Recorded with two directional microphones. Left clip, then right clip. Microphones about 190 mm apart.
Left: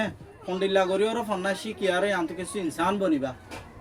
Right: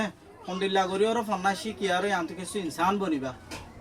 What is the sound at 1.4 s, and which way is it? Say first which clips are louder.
Speech: even; 10° right (ahead or behind).